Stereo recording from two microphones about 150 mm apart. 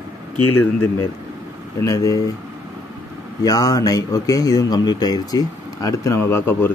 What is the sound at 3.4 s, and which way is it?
A man's voice, 25° left (ahead or behind).